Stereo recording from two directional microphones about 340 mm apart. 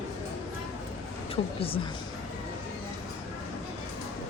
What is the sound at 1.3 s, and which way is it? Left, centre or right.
Speech, centre.